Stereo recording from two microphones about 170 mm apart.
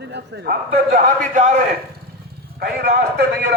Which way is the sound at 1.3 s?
50° right (ahead or behind).